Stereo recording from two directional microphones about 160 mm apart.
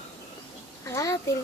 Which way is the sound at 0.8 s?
20° left (ahead or behind).